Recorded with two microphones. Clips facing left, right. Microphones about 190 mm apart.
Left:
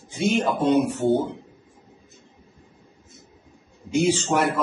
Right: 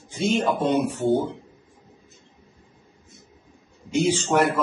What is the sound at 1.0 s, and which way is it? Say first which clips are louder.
Speech: left 1 dB; centre (ahead or behind).